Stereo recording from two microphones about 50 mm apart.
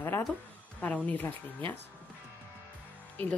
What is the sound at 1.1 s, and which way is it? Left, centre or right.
Speech, left.